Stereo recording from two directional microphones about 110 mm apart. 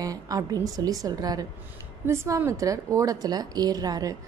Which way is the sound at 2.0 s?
25° right (ahead or behind).